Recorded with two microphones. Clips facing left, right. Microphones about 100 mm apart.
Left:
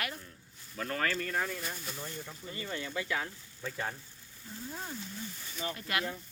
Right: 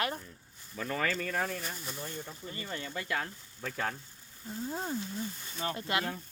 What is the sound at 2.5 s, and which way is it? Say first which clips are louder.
Speech: left 2 dB; 40° right (ahead or behind).